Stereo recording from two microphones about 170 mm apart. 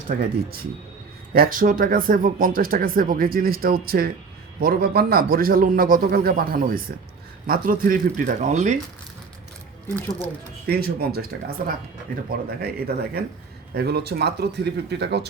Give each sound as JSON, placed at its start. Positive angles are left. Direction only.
{"t": 0.1, "sound": "speech", "side_deg": -60}
{"t": 1.3, "sound": "speech", "side_deg": -55}
{"t": 10.7, "sound": "speech", "side_deg": -65}